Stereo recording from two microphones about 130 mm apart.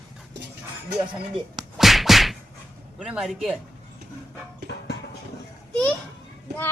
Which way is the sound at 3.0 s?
5° right (ahead or behind).